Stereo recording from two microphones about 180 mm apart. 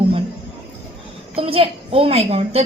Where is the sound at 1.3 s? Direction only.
30° right (ahead or behind).